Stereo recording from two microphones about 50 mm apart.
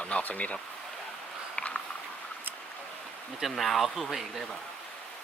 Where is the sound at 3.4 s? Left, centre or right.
Centre.